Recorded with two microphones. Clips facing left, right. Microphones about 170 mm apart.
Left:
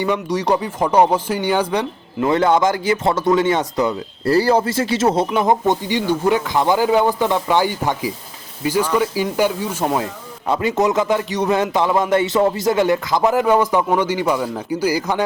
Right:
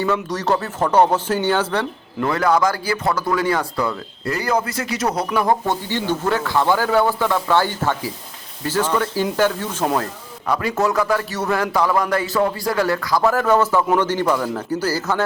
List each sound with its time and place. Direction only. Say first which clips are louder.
0.0 s speech: left 2 dB; 15° left (ahead or behind)
4.2 s speech: left 6 dB; 35° left (ahead or behind); by 10.1 s 10° left (ahead or behind)
10.4 s a man's voice: left 2 dB; 25° left (ahead or behind)